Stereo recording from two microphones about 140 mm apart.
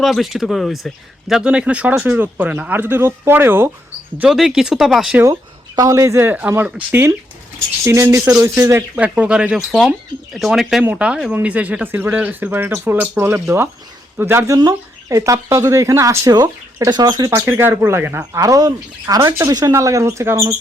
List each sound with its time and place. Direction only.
0.0 s speech: centre (ahead or behind)
4.2 s speech: 5° right (ahead or behind)
5.1 s speech: 25° right (ahead or behind)
9.0 s speech: 5° right (ahead or behind); by 17.3 s 30° right (ahead or behind)
17.3 s speech: 15° right (ahead or behind)